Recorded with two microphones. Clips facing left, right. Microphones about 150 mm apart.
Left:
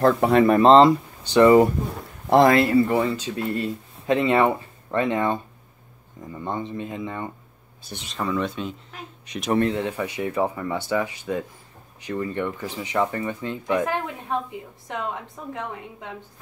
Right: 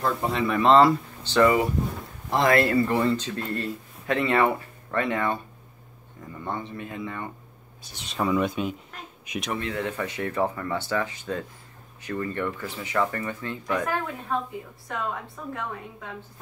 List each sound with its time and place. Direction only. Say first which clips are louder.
0.0 s speech: left 9 dB; 60° left (ahead or behind)
0.6 s speech: left 3 dB; 30° left (ahead or behind)
0.8 s speech: left 3 dB; 15° left (ahead or behind)
2.5 s speech: left 3 dB; 15° left (ahead or behind)
8.1 s speech: right 2 dB; 10° right (ahead or behind)
9.7 s speech: left 4 dB; 20° left (ahead or behind)